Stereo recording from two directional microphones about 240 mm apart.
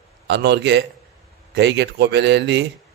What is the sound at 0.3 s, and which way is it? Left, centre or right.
Speech, right.